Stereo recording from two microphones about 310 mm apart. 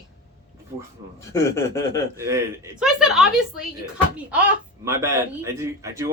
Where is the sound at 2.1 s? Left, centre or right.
Centre.